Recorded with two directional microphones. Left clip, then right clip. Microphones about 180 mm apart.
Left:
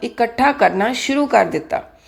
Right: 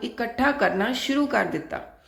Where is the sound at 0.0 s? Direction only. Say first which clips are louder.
Left 8 dB; 25° left (ahead or behind).